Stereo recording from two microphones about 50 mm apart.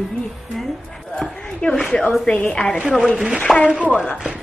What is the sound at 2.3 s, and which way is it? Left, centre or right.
Speech, left.